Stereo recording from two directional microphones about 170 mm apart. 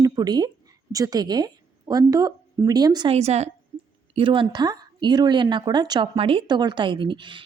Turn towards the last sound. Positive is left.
turn(degrees=-30)  # may be behind; listen again after turning